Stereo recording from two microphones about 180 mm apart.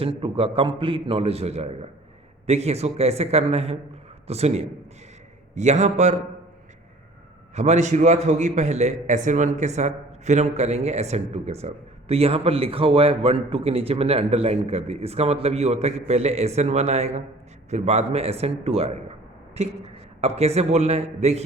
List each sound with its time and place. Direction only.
0.0 s a man's voice: 30° right (ahead or behind)
7.5 s a man's voice: 40° right (ahead or behind)